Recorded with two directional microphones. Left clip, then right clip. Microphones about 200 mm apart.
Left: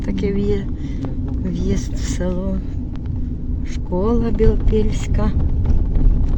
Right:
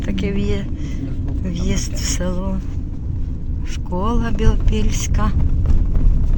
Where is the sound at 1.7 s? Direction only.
5° left (ahead or behind).